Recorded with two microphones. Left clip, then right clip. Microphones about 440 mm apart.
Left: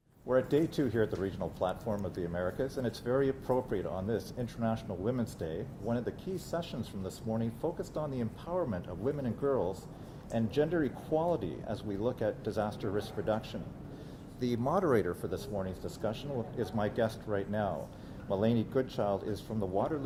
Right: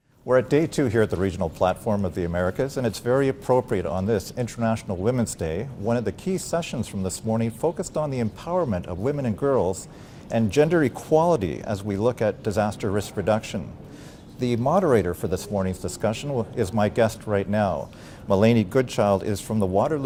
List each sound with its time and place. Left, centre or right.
0.3 s speech: right